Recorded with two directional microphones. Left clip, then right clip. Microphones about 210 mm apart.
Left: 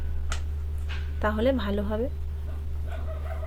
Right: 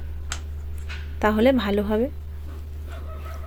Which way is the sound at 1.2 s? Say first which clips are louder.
Right 6 dB; 35° right (ahead or behind).